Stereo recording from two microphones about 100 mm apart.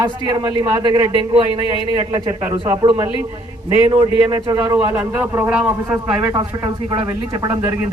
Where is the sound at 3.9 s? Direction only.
60° right (ahead or behind).